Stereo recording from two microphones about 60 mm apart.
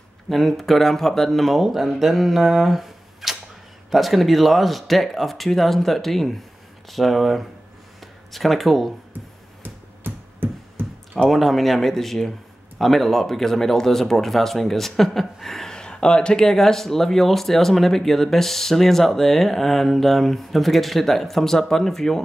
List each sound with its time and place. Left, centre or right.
0.3 s speech: centre
9.6 s a sound: right
11.2 s speech: centre